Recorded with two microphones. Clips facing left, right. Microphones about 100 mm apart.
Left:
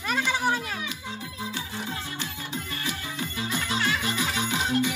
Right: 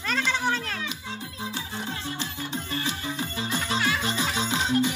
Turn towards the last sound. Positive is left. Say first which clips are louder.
# right 1 dB
turn(degrees=-20)  # may be behind; listen again after turning